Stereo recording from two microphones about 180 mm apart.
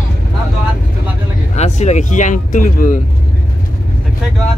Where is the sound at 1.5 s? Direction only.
40° left (ahead or behind).